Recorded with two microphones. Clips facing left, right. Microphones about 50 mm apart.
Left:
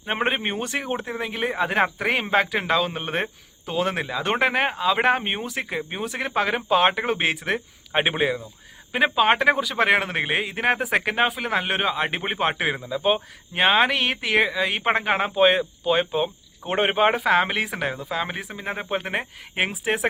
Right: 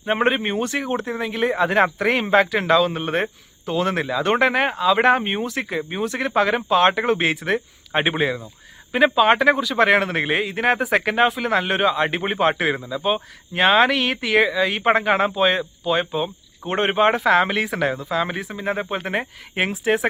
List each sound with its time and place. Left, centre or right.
0.4 s speech: left